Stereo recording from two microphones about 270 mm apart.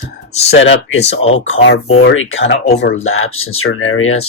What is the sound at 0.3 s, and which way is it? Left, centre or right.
Speech, left.